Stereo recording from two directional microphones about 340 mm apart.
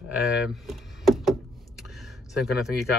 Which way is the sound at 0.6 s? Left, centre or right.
Centre.